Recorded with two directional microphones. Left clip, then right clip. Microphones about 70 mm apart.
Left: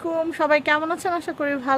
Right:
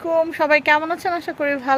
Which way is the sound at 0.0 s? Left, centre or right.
Left.